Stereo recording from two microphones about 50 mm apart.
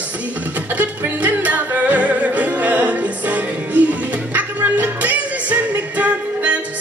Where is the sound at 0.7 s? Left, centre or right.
Right.